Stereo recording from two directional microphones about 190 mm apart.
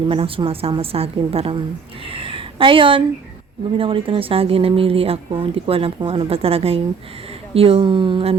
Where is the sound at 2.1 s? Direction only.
30° right (ahead or behind).